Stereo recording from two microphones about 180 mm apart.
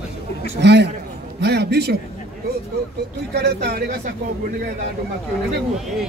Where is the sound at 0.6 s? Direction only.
70° right (ahead or behind).